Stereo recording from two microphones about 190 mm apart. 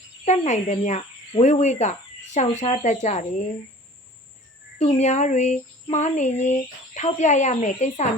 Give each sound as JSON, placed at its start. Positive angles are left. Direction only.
{"t": 0.3, "sound": "speech", "side_deg": 40}
{"t": 4.8, "sound": "speech", "side_deg": 35}